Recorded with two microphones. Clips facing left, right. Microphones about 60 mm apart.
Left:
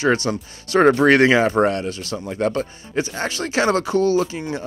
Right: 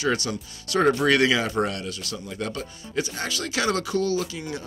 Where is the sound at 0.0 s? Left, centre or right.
Left.